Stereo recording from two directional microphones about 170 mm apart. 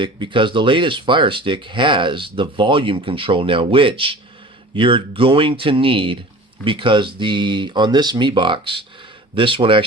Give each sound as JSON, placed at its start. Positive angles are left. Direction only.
{"t": 0.0, "sound": "speech", "side_deg": -30}